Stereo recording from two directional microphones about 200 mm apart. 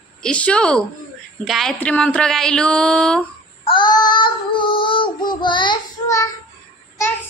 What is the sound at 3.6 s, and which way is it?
Child singing, 25° left (ahead or behind).